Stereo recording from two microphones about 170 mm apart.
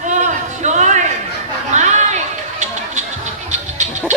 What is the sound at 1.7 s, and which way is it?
Chatter, 45° right (ahead or behind).